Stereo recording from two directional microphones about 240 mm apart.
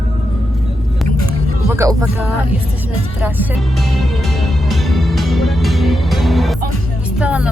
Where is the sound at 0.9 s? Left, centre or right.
Centre.